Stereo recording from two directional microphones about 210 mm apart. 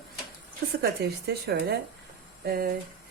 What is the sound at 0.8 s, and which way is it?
Speech, 50° right (ahead or behind).